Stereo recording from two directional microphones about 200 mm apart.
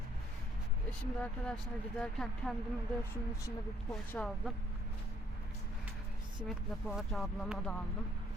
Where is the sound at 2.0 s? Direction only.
5° left (ahead or behind).